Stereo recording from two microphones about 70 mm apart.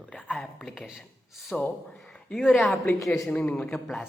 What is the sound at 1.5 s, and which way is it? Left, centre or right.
Speech, centre.